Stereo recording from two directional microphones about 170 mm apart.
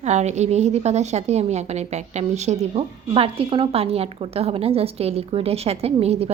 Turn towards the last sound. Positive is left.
turn(degrees=-35)  # may be behind; listen again after turning